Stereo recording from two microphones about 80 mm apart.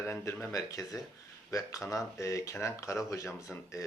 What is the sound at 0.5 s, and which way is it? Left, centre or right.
Speech, left.